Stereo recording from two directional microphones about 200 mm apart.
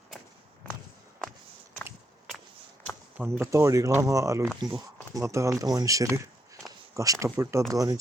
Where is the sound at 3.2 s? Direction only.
15° right (ahead or behind).